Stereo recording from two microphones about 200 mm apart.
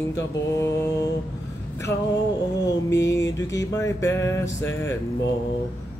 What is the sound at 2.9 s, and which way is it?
Music, 15° left (ahead or behind).